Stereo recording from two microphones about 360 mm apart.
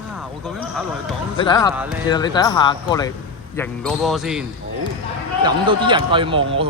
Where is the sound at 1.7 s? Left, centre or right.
Centre.